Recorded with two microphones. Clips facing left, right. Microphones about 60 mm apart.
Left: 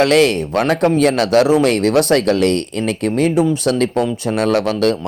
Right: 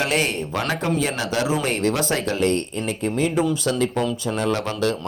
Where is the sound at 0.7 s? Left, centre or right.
Left.